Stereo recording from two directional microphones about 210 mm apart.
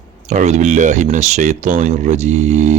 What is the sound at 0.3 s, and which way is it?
Speech, 35° right (ahead or behind).